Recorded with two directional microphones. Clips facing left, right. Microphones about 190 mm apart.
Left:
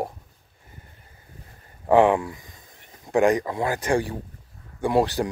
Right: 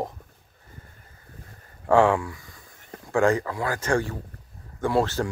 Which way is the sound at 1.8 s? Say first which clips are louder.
Left 2 dB; 20° left (ahead or behind).